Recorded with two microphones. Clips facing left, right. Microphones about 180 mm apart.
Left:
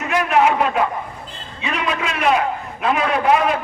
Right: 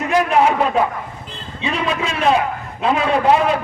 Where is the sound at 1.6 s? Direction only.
30° right (ahead or behind).